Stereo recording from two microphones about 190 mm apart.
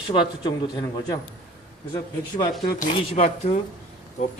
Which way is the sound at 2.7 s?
40° left (ahead or behind).